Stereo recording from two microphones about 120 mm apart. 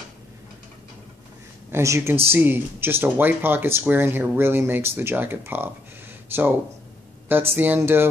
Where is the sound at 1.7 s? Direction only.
20° right (ahead or behind).